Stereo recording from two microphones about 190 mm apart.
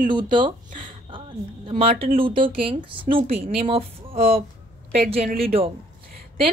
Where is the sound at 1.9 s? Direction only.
50° right (ahead or behind).